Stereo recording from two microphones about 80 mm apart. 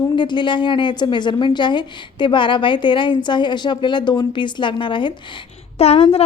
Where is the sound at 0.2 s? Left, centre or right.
Left.